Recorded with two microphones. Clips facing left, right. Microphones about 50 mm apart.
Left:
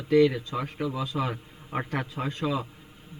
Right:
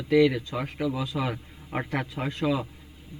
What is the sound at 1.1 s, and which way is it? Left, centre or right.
A man's voice, centre.